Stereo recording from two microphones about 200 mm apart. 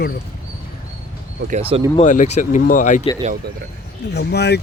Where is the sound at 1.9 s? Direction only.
40° left (ahead or behind).